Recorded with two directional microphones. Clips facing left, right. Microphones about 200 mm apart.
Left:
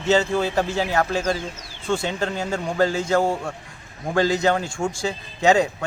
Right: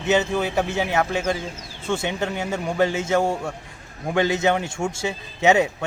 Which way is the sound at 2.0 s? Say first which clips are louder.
Even; 20° right (ahead or behind).